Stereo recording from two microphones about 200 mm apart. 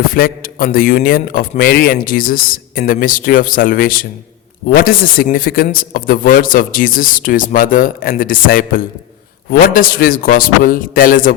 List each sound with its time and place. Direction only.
0.1 s a man's voice: 45° left (ahead or behind)